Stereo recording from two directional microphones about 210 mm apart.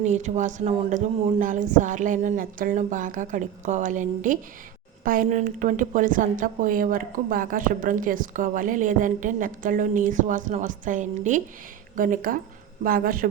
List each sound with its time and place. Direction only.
0.0 s a woman's voice: 35° right (ahead or behind)